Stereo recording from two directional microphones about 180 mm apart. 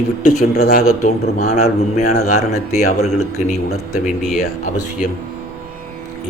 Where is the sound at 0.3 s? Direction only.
40° left (ahead or behind).